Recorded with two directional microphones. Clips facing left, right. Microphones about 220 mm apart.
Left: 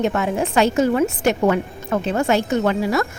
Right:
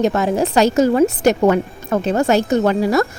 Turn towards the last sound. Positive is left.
turn(degrees=-40)  # may be behind; listen again after turning